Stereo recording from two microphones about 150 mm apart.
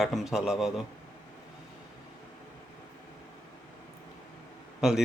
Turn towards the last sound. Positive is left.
turn(degrees=-5)  # may be behind; listen again after turning